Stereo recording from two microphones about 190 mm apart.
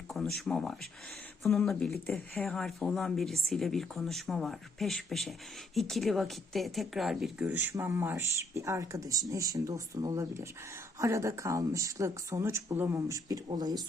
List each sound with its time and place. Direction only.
0.1 s speech: centre (ahead or behind); by 13.8 s 20° right (ahead or behind)